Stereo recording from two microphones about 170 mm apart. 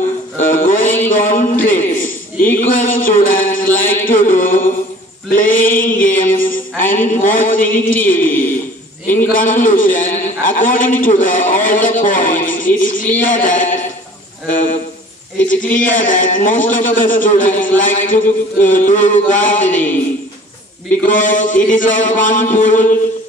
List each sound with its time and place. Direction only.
0.4 s music: 50° left (ahead or behind)
1.0 s a sound: 50° left (ahead or behind)
2.7 s music: 55° left (ahead or behind)
5.3 s mantra: 50° left (ahead or behind)
9.2 s a sound: 55° left (ahead or behind)
13.2 s a man's voice: 50° left (ahead or behind)
14.5 s a sound: 50° left (ahead or behind)
15.5 s a man's voice: 50° left (ahead or behind)
21.0 s a man's voice: 50° left (ahead or behind)